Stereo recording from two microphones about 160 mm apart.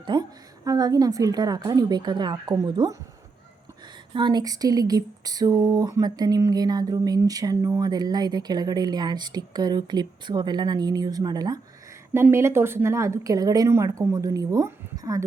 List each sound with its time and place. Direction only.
0.0 s speech: 30° right (ahead or behind)
4.1 s speech: 30° right (ahead or behind)